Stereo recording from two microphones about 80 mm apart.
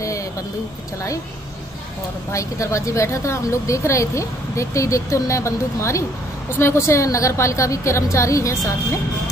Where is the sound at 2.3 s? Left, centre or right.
Left.